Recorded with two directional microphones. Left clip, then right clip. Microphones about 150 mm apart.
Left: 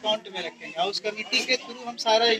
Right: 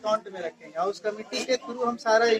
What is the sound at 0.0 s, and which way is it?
A man's voice, 20° right (ahead or behind).